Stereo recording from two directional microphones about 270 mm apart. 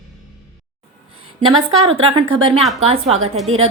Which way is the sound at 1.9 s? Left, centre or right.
Centre.